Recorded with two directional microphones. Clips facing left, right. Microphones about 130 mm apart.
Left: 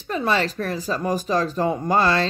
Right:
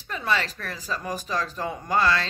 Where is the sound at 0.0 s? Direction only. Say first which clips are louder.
Left 5 dB; 35° left (ahead or behind).